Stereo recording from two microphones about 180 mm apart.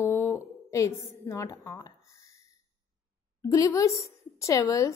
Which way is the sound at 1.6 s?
20° left (ahead or behind).